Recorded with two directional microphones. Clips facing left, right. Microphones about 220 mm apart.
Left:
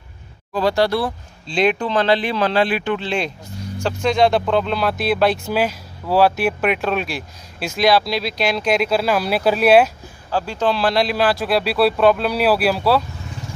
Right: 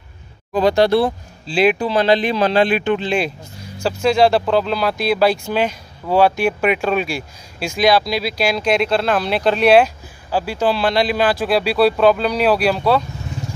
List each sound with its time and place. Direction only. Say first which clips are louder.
0.5 s speech: right 4 dB; 20° right (ahead or behind)
1.5 s speech: right 2 dB; 5° right (ahead or behind)
10.3 s speech: right 2 dB; 10° right (ahead or behind)